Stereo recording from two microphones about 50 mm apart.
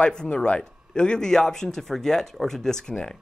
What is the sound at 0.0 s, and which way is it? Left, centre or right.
Speech, centre.